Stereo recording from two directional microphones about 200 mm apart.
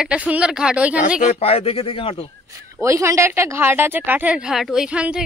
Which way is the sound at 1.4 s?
30° left (ahead or behind).